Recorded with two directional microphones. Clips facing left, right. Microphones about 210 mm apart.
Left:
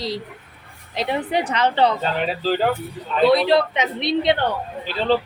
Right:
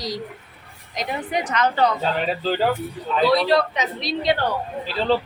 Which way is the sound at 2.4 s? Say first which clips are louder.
Left 2 dB; 5° left (ahead or behind).